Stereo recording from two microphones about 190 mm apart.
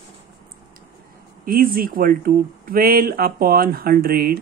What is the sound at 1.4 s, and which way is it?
Speech, 50° right (ahead or behind).